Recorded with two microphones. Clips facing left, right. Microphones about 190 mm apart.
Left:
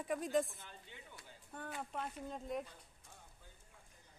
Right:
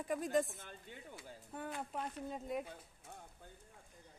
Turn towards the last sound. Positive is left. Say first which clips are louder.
# right 8 dB
turn(degrees=-60)  # may be behind; listen again after turning